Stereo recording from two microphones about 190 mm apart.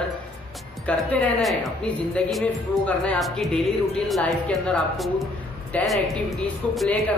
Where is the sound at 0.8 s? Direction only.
5° left (ahead or behind).